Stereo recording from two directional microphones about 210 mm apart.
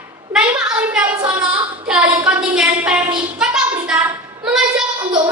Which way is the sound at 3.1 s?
25° right (ahead or behind).